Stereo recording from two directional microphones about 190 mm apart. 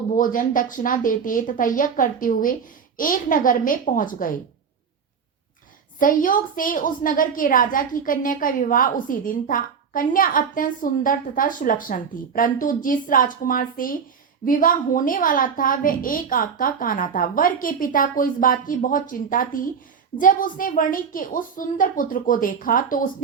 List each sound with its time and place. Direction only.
0.2 s a woman's voice: 45° left (ahead or behind)
6.0 s a woman's voice: 45° left (ahead or behind)